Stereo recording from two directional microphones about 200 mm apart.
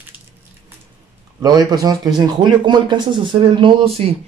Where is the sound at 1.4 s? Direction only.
20° right (ahead or behind).